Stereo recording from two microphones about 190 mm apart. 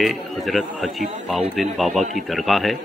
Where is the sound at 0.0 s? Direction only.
Centre (ahead or behind).